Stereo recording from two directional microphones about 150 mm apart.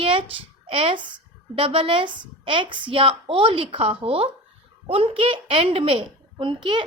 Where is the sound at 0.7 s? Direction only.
35° right (ahead or behind).